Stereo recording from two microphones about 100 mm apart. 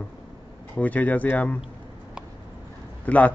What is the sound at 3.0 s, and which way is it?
Speech, 15° left (ahead or behind).